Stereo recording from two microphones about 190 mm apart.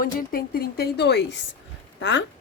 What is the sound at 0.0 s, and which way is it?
A woman's voice, 50° left (ahead or behind).